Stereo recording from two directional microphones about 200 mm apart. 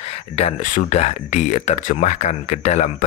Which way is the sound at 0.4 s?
35° left (ahead or behind).